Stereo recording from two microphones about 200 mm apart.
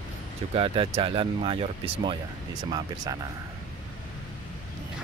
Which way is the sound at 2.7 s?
20° right (ahead or behind).